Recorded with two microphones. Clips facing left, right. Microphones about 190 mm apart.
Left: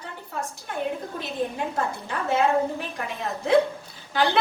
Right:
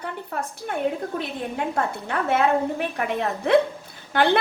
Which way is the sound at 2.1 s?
60° right (ahead or behind).